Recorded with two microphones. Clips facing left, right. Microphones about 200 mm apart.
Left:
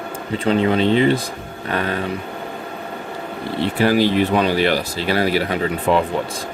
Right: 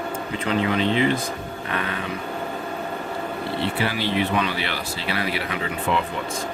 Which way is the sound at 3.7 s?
40° left (ahead or behind).